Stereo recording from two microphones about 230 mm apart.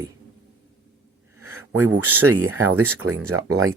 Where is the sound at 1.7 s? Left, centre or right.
Right.